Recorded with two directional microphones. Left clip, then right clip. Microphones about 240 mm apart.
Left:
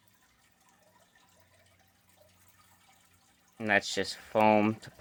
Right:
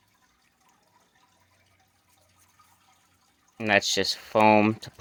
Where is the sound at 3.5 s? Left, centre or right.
Right.